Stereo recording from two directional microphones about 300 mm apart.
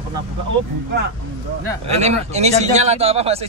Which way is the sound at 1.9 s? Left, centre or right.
Right.